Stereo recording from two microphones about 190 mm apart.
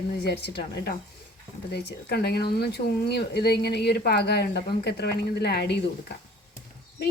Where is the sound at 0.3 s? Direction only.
60° left (ahead or behind).